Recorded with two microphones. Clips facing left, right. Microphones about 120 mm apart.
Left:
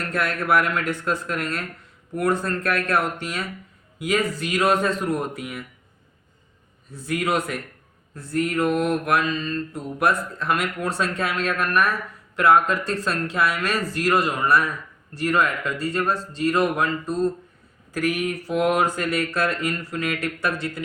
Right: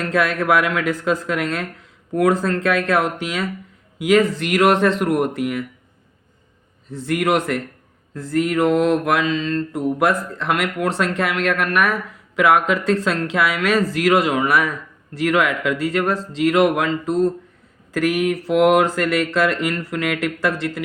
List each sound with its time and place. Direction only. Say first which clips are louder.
0.1 s speech: right 4 dB; 90° right
6.8 s a man's voice: right 5 dB; 90° right
8.1 s speech: right 4 dB; 90° right